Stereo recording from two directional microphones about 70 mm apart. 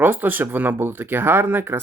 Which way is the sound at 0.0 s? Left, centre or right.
Right.